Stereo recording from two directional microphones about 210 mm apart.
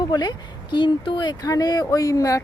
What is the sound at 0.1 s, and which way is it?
Speech, 20° left (ahead or behind).